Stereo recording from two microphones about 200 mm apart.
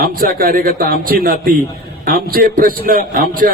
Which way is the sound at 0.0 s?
45° right (ahead or behind).